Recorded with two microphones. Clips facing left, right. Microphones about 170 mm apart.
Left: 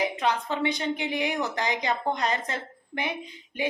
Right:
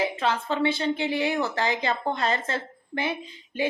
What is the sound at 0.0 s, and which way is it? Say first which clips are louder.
A woman's voice: right 1 dB; 15° left (ahead or behind).